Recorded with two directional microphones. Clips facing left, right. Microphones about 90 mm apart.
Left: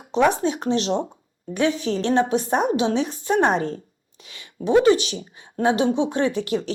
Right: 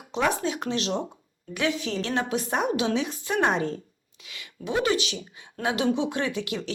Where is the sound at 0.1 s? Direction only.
30° left (ahead or behind).